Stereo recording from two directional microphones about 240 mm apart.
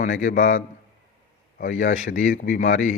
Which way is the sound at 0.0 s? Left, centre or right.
Left.